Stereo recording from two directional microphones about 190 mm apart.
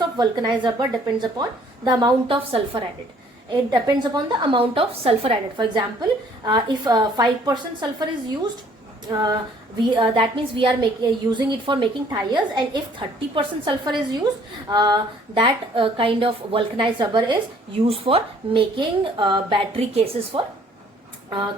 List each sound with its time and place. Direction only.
0.2 s a woman's voice: 20° right (ahead or behind)